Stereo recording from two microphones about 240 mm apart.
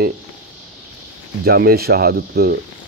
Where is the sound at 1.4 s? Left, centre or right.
Right.